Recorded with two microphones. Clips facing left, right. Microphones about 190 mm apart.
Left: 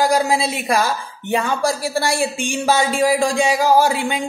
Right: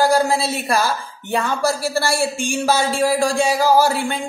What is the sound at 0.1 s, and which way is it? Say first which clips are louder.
A woman's voice: even; 15° left (ahead or behind).